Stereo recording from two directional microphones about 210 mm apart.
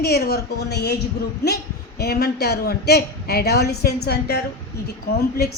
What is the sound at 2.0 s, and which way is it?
A woman's voice, 50° left (ahead or behind).